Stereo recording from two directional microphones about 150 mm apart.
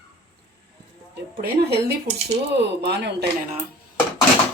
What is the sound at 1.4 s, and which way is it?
Speech, 90° right.